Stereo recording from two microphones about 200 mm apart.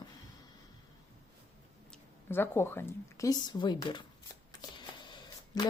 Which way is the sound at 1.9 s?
10° left (ahead or behind).